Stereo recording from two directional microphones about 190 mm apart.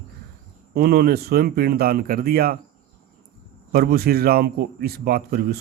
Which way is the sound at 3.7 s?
55° right (ahead or behind).